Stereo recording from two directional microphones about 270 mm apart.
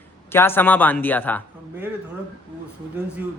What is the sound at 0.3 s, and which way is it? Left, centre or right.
A man's voice, centre.